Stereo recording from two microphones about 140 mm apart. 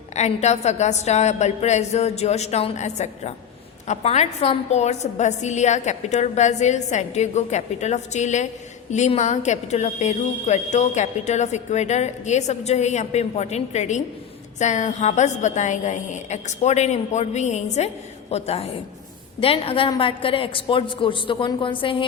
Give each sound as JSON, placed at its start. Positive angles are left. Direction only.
{"t": 0.1, "sound": "a woman's voice", "side_deg": 55}